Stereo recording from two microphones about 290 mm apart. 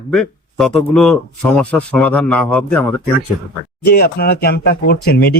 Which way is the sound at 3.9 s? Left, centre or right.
Left.